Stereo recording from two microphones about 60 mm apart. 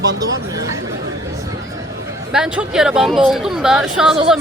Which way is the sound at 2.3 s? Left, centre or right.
Centre.